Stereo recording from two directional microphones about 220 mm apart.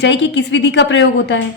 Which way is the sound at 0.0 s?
55° left (ahead or behind).